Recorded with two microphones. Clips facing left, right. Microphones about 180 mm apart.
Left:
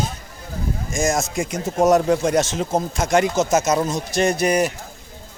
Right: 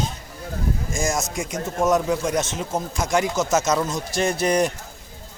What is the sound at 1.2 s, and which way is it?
Speech, 55° left (ahead or behind).